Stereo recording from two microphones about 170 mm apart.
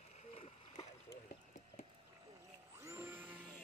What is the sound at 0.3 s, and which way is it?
Splash, 35° left (ahead or behind).